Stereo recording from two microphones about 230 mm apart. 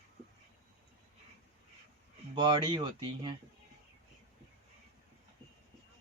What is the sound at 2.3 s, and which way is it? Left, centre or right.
Speech, centre.